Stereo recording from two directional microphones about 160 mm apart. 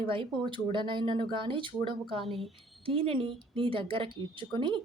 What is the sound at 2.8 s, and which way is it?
A woman's voice, 35° right (ahead or behind).